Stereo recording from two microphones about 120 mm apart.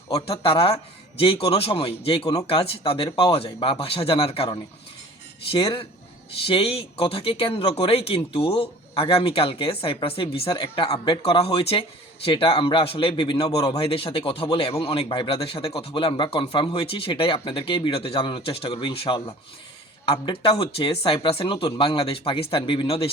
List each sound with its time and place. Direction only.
0.1 s a man's voice: 50° left (ahead or behind)
11.2 s speech: 50° left (ahead or behind)